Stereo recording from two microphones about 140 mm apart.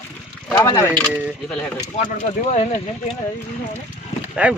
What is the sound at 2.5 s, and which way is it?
Speech, 50° left (ahead or behind).